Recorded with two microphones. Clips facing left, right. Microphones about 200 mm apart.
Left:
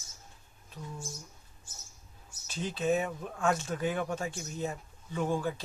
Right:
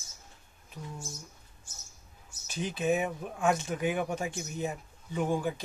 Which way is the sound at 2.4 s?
15° right (ahead or behind).